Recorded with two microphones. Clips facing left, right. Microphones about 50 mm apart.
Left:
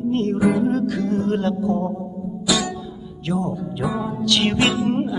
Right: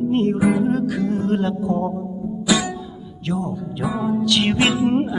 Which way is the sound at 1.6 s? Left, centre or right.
Right.